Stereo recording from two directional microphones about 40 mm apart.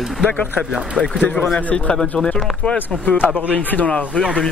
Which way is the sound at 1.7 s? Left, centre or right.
Left.